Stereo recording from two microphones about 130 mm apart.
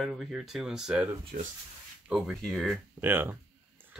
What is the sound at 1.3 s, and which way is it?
Speech, 85° right.